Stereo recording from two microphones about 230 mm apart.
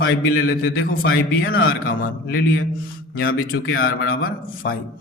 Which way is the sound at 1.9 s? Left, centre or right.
Left.